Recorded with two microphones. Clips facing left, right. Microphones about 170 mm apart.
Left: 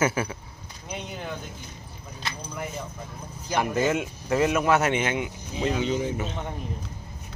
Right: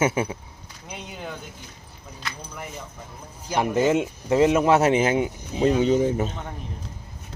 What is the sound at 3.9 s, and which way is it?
Speech, 25° right (ahead or behind).